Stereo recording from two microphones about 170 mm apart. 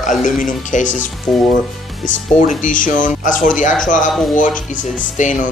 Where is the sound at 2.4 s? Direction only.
50° left (ahead or behind).